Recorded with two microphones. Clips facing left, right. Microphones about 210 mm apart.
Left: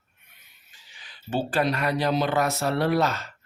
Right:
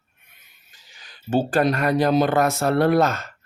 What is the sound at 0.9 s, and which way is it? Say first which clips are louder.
Speech: right 6 dB; 45° right (ahead or behind).